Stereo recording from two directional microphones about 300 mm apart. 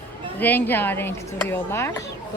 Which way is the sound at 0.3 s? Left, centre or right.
Centre.